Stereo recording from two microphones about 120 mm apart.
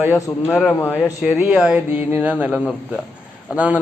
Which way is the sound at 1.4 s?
5° right (ahead or behind).